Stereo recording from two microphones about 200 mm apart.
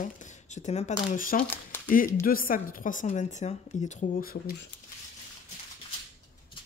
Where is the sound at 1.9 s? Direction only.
45° left (ahead or behind).